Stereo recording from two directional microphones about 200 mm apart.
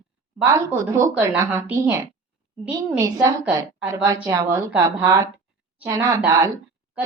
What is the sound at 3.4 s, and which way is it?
A woman's voice, 15° right (ahead or behind).